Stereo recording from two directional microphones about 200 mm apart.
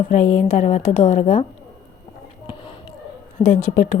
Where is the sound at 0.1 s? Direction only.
35° left (ahead or behind).